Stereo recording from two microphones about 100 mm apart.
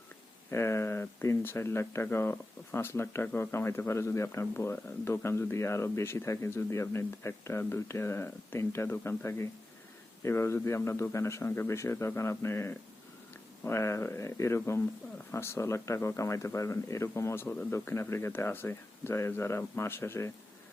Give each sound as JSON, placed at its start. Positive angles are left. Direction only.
{"t": 0.5, "sound": "speech", "side_deg": 25}